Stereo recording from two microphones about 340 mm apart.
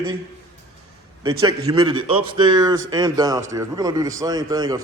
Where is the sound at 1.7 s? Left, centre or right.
Centre.